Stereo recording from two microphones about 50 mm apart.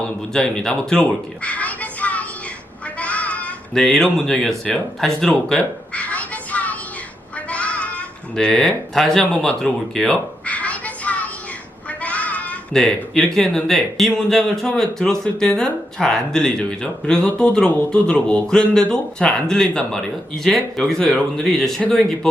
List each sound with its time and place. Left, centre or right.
0.3 s speech: centre
1.0 s a sound: left
3.0 s music: left
3.8 s speech: centre
5.9 s child singing: left
7.5 s goat: left
9.0 s speech: centre
10.4 s child singing: left
11.9 s a sound: left
12.7 s speech: centre